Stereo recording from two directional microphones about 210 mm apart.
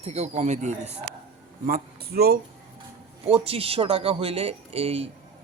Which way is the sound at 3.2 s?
25° right (ahead or behind).